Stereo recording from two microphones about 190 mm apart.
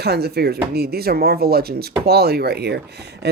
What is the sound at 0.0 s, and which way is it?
Speech, 55° right (ahead or behind).